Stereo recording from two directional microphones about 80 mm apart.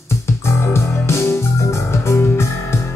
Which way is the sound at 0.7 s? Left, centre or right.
Left.